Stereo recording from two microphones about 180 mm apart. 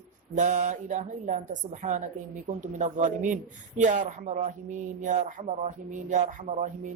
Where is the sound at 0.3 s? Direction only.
45° right (ahead or behind).